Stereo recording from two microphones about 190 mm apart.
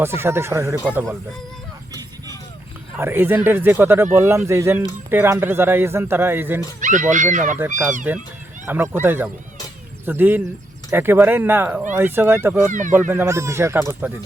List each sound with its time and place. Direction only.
0.0 s a man's voice: 10° right (ahead or behind)
3.0 s a man's voice: 10° right (ahead or behind)
6.7 s speech: 40° right (ahead or behind)
8.1 s a man's voice: 10° right (ahead or behind)